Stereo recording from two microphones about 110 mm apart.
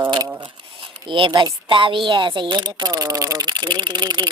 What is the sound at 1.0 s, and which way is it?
A woman's voice, 50° right (ahead or behind).